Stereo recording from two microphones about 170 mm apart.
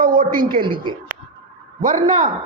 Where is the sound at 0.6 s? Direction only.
30° right (ahead or behind).